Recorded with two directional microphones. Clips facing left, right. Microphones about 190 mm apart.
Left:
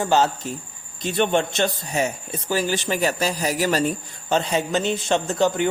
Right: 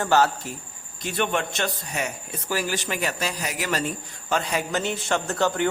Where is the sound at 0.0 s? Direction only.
20° left (ahead or behind).